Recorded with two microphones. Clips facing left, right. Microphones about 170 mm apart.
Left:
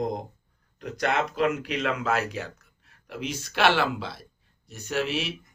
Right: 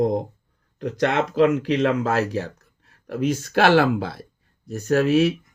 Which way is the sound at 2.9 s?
45° right (ahead or behind).